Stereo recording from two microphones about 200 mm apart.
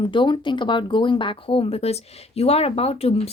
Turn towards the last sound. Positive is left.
turn(degrees=30)  # may be behind; listen again after turning